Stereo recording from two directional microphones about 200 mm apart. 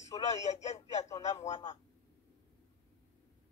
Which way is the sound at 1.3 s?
35° left (ahead or behind).